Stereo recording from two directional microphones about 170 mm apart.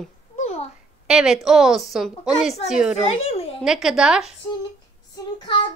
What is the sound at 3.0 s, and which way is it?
Speech, 35° left (ahead or behind).